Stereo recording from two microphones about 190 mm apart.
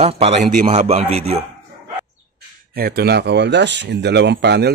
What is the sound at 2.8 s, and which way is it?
Speech, 55° right (ahead or behind).